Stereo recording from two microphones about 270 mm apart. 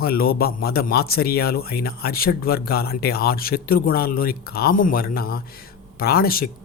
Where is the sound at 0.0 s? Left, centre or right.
Left.